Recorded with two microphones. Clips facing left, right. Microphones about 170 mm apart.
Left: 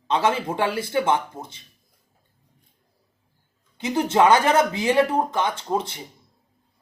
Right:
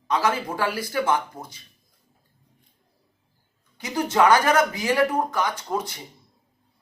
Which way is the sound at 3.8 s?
25° left (ahead or behind).